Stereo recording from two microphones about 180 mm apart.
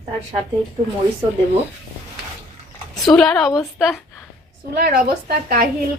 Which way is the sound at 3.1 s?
Centre (ahead or behind).